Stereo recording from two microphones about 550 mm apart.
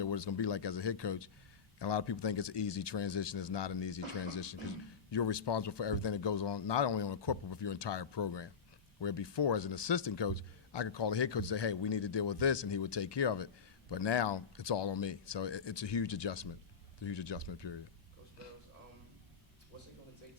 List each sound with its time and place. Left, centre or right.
0.0 s speech: left